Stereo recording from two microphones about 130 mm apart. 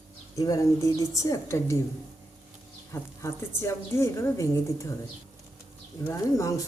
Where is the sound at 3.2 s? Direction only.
20° left (ahead or behind).